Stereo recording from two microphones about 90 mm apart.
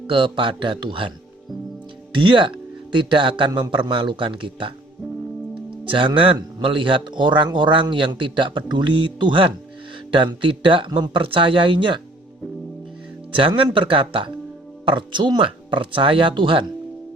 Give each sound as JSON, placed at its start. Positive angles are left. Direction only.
{"t": 0.1, "sound": "speech", "side_deg": -65}
{"t": 2.1, "sound": "a man's voice", "side_deg": -65}
{"t": 5.9, "sound": "a man's voice", "side_deg": -70}
{"t": 13.7, "sound": "speech", "side_deg": -70}
{"t": 14.8, "sound": "speech", "side_deg": -60}